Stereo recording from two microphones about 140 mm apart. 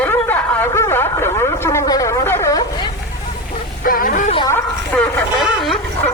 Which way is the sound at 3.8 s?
90° left.